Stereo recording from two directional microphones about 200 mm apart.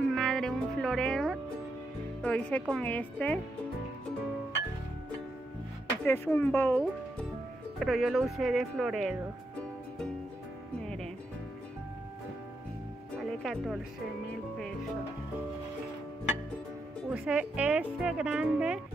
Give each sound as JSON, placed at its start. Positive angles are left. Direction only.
{"t": 0.0, "sound": "music", "side_deg": 0}
{"t": 2.2, "sound": "speech", "side_deg": 5}
{"t": 6.0, "sound": "speech", "side_deg": 10}
{"t": 7.8, "sound": "speech", "side_deg": 0}
{"t": 13.2, "sound": "music", "side_deg": 0}
{"t": 17.1, "sound": "speech", "side_deg": -5}